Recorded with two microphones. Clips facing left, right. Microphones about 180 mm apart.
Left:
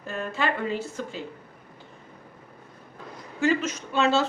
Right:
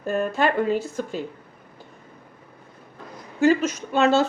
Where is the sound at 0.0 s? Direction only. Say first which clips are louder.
Right 7 dB; 50° right (ahead or behind).